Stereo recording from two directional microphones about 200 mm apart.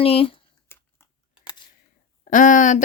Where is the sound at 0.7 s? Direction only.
10° left (ahead or behind).